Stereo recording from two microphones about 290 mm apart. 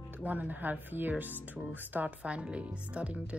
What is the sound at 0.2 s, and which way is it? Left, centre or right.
Speech, centre.